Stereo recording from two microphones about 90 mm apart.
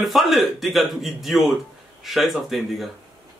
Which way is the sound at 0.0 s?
Centre (ahead or behind).